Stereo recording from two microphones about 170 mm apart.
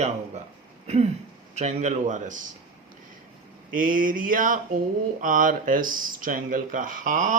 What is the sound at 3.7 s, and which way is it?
Speech, 50° right (ahead or behind).